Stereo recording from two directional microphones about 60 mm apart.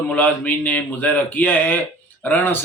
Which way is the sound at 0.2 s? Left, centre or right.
Left.